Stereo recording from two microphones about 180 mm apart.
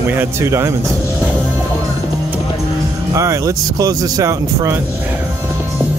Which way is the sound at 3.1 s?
15° right (ahead or behind).